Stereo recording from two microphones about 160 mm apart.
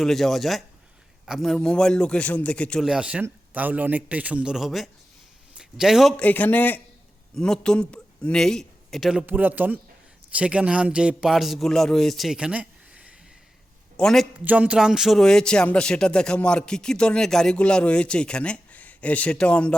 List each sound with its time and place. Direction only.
0.0 s a man's voice: centre (ahead or behind)
9.2 s a man's voice: 10° right (ahead or behind)
13.9 s a man's voice: 5° left (ahead or behind)
14.3 s a man's voice: 10° right (ahead or behind); by 19.7 s 5° left (ahead or behind)